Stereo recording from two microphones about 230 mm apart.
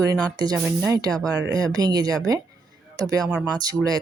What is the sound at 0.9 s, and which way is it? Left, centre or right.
Speech, centre.